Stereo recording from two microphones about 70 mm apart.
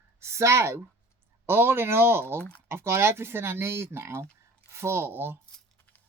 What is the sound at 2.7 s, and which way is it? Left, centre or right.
Speech, right.